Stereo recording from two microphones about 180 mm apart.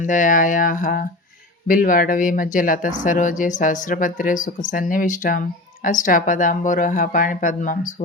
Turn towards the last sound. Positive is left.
turn(degrees=45)  # may be behind; listen again after turning